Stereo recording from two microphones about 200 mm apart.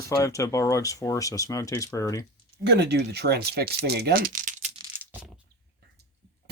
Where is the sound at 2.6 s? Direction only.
55° right (ahead or behind); by 4.7 s 40° right (ahead or behind).